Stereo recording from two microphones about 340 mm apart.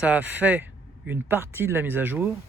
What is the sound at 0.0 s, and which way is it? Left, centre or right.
Speech, centre.